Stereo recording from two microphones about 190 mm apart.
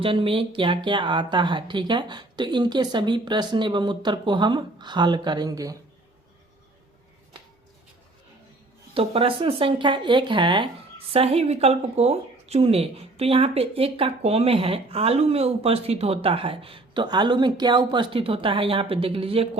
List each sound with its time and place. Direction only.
0.0 s speech: 30° right (ahead or behind)
9.0 s speech: 30° right (ahead or behind)